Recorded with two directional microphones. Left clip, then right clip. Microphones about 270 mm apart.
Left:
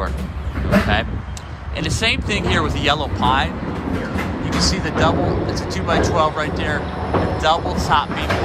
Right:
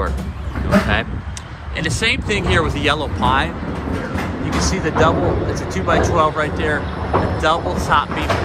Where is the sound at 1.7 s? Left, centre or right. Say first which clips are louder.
Right 1 dB; centre.